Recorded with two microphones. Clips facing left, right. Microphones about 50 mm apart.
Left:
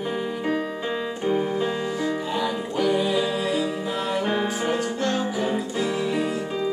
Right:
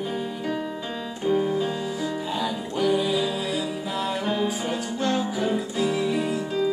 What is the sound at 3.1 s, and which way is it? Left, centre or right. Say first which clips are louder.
Music: left 2 dB; left.